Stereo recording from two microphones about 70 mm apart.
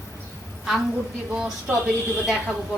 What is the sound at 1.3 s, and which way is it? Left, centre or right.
Speech, centre.